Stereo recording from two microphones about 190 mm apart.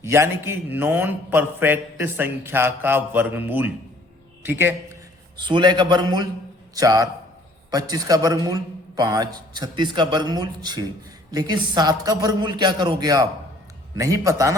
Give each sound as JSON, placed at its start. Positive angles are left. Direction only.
{"t": 0.0, "sound": "a man's voice", "side_deg": -15}
{"t": 5.4, "sound": "a man's voice", "side_deg": -25}